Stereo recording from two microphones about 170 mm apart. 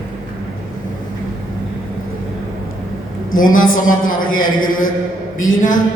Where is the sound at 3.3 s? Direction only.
50° left (ahead or behind).